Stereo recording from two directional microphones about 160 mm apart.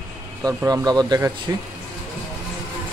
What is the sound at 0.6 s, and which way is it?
Speech, 25° right (ahead or behind).